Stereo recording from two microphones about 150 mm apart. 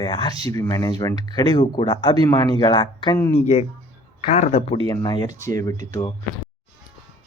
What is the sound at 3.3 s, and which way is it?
Speech, 45° left (ahead or behind).